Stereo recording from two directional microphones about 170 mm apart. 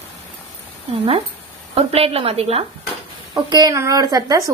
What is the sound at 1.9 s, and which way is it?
Speech, 35° right (ahead or behind).